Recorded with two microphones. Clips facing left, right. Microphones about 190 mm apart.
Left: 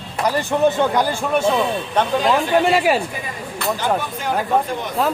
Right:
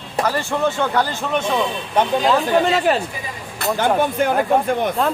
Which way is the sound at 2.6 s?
10° left (ahead or behind).